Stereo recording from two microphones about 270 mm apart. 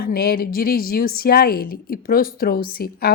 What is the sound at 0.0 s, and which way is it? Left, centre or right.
A woman's voice, left.